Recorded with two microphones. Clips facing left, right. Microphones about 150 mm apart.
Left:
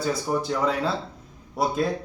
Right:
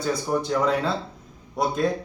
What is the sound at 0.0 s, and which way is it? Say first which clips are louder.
Speech: right 1 dB; centre (ahead or behind).